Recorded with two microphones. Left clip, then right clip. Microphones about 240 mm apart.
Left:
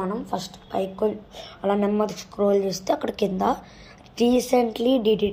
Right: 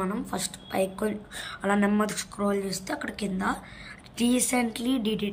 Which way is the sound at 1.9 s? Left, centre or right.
Centre.